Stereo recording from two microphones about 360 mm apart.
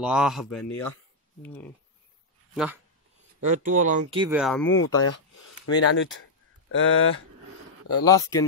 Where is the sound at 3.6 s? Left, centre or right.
Right.